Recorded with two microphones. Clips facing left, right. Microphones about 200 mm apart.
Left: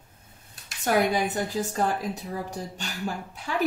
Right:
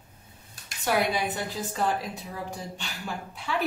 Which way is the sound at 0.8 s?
45° left (ahead or behind).